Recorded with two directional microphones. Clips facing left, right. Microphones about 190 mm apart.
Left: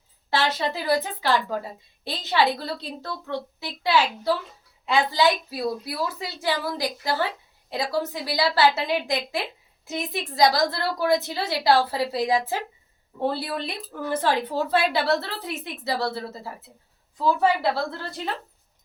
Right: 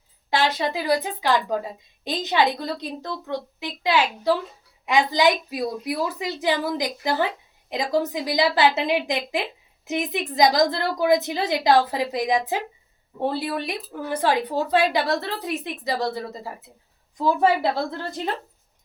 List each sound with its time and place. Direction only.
0.3 s a woman's voice: 15° right (ahead or behind)